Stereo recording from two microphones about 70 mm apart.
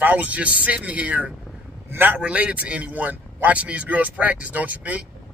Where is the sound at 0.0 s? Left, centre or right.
Right.